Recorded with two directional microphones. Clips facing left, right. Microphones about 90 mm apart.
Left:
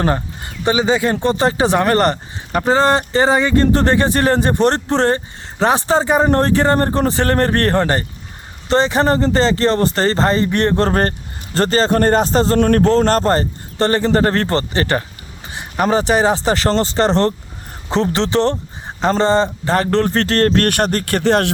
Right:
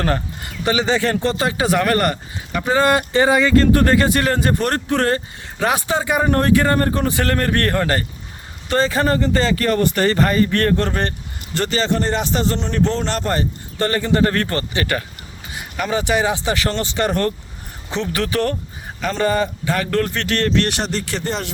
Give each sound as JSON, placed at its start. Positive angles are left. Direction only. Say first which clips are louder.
{"t": 0.0, "sound": "speech", "louder": "left 3 dB", "side_deg": 25}
{"t": 2.5, "sound": "speech", "louder": "left 5 dB", "side_deg": 45}
{"t": 2.7, "sound": "speech", "louder": "even", "side_deg": 30}
{"t": 10.8, "sound": "speech", "louder": "left 5 dB", "side_deg": 40}
{"t": 12.5, "sound": "speech", "louder": "left 8 dB", "side_deg": 55}
{"t": 18.2, "sound": "speech", "louder": "left 4 dB", "side_deg": 25}